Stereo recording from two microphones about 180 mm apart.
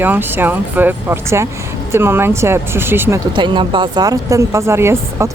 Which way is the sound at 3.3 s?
25° right (ahead or behind).